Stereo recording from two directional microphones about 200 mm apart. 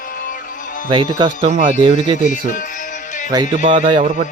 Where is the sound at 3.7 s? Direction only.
35° right (ahead or behind).